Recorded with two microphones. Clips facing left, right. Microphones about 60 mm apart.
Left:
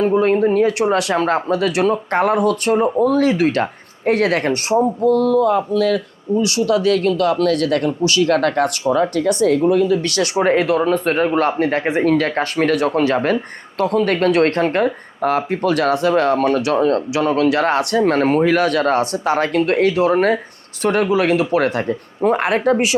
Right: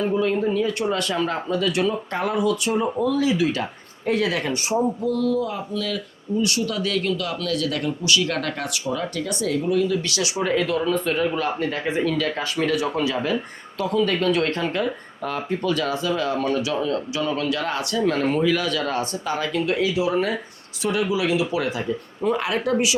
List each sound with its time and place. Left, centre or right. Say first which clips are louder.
0.0 s speech: left 7 dB; left
0.9 s speech: left 7 dB; left